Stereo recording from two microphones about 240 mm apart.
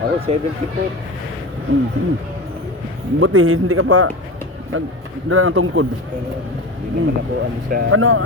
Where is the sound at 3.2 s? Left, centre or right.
Right.